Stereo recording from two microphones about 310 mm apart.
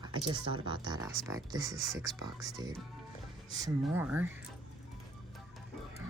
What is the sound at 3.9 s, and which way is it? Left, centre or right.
Speech, centre.